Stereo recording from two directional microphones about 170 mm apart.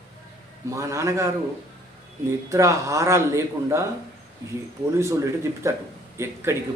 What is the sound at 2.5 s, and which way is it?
Speech, 20° right (ahead or behind).